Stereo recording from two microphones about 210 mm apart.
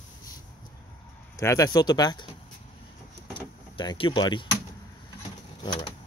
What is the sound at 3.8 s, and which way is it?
Speech, 25° left (ahead or behind).